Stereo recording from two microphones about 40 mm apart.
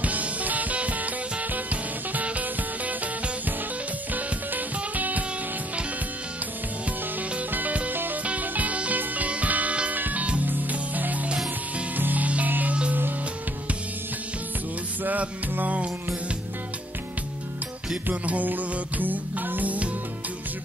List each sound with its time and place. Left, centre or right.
0.0 s music: right
4.1 s music: right
7.5 s music: right
7.9 s music: right
8.2 s music: right
15.0 s music: right
18.0 s music: right
18.5 s music: right